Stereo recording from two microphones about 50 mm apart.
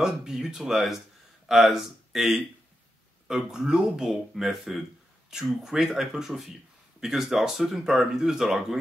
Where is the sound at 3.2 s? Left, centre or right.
Centre.